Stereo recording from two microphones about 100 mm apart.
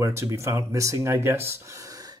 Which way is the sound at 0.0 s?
30° right (ahead or behind).